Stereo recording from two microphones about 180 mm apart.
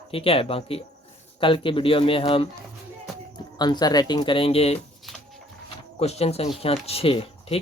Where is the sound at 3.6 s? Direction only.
25° left (ahead or behind).